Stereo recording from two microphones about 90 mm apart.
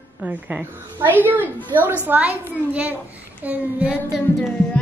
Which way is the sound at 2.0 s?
20° right (ahead or behind).